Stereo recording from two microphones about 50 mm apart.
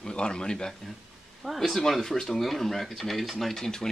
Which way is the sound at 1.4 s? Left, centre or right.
Centre.